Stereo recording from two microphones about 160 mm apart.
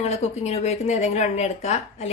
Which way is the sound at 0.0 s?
45° left (ahead or behind).